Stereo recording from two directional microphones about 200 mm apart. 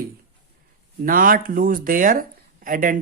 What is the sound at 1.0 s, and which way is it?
Speech, 45° right (ahead or behind).